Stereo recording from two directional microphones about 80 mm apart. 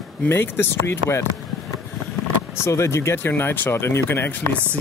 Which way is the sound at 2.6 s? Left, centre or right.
Left.